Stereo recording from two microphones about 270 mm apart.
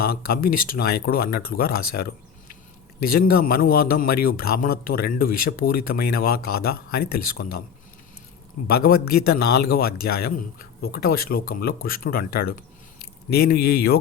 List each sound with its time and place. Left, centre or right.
0.0 s a man's voice: left
8.6 s a man's voice: left